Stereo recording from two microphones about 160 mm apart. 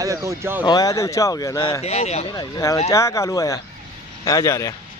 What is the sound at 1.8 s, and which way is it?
Speech, 40° left (ahead or behind).